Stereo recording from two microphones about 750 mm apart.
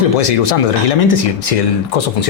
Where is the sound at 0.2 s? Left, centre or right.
Left.